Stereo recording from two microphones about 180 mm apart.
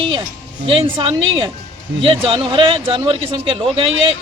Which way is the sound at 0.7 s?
30° right (ahead or behind).